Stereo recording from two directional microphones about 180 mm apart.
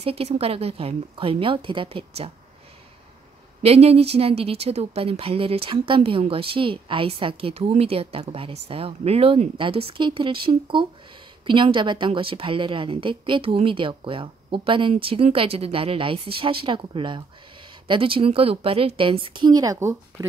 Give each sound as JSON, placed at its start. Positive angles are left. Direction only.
{"t": 0.0, "sound": "speech", "side_deg": -35}
{"t": 3.6, "sound": "a woman's voice", "side_deg": -35}